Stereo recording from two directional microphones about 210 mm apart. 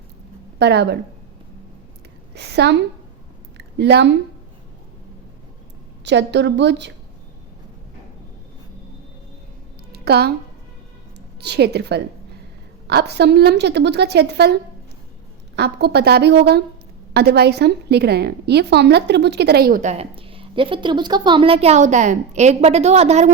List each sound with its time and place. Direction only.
0.6 s a woman's voice: 50° right (ahead or behind)
2.3 s a sound: 50° right (ahead or behind)
3.8 s a woman's voice: 50° right (ahead or behind)
6.1 s a woman's voice: 55° right (ahead or behind)
9.9 s a sound: 50° right (ahead or behind)
11.3 s a woman's voice: 50° right (ahead or behind)
15.5 s a woman's voice: 50° right (ahead or behind); by 23.3 s 30° right (ahead or behind)